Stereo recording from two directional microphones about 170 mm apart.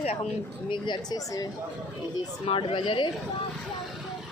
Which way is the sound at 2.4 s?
30° left (ahead or behind).